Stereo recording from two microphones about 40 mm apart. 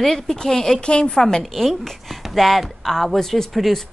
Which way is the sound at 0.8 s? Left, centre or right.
Left.